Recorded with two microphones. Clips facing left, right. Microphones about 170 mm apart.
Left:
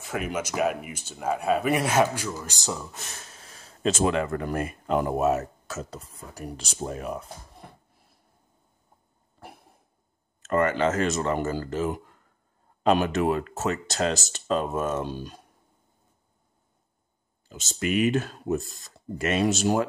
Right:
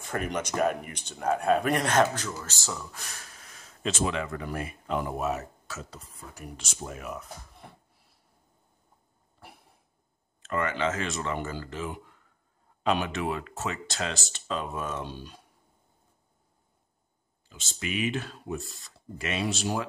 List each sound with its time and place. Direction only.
0.0 s speech: 5° left (ahead or behind); by 3.7 s 25° left (ahead or behind)
3.8 s speech: 45° left (ahead or behind)
10.4 s speech: 45° left (ahead or behind)
17.5 s speech: 45° left (ahead or behind)